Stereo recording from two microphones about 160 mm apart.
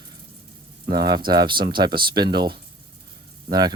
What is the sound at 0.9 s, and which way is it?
Speech, 25° right (ahead or behind).